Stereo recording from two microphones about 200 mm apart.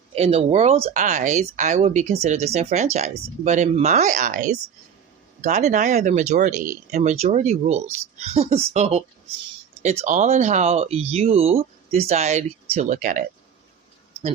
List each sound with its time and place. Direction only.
0.2 s speech: 30° right (ahead or behind)